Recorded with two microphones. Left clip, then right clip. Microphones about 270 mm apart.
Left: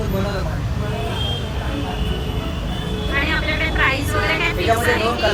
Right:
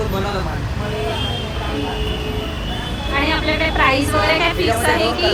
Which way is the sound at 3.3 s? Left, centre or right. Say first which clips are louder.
Right 3 dB; centre.